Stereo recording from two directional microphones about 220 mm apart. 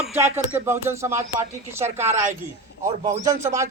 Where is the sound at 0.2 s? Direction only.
10° right (ahead or behind).